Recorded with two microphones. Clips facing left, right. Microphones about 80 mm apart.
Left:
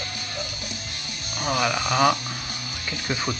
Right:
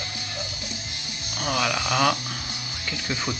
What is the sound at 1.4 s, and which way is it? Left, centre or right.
Hum, centre.